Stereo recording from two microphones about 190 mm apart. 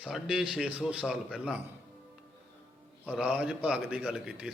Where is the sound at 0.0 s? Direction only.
Centre (ahead or behind).